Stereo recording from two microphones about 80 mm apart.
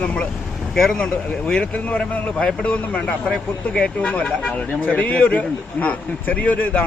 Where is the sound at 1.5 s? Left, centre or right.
Centre.